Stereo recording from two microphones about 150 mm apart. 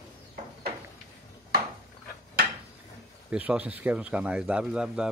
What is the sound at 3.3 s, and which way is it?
Speech, 10° right (ahead or behind).